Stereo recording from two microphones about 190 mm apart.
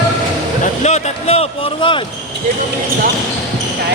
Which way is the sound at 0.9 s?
35° left (ahead or behind).